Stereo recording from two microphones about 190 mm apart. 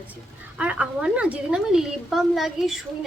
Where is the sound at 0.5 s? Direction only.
5° right (ahead or behind).